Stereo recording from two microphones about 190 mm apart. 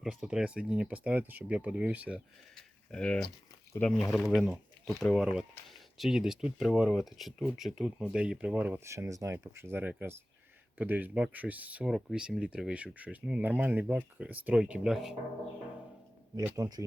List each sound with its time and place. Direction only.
0.0 s speech: centre (ahead or behind)
16.4 s speech: 20° right (ahead or behind)